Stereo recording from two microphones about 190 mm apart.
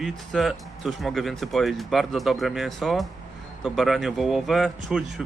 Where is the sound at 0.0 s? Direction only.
Centre (ahead or behind).